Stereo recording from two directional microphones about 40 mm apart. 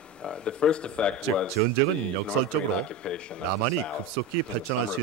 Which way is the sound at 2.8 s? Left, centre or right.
Left.